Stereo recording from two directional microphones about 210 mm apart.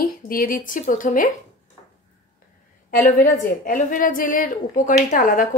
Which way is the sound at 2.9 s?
40° left (ahead or behind).